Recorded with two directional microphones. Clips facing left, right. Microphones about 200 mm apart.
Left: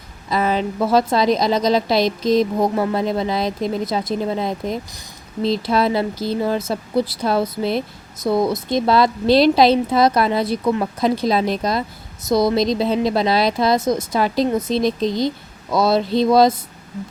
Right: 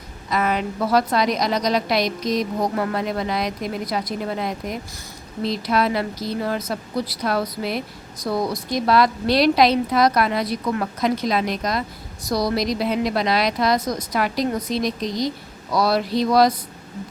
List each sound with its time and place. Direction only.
0.3 s speech: 30° left (ahead or behind)